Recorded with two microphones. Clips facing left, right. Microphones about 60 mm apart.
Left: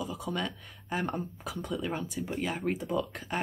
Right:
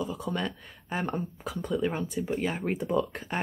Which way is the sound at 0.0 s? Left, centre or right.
Centre.